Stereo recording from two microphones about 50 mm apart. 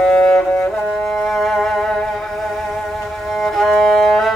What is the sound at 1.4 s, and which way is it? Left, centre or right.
Music, centre.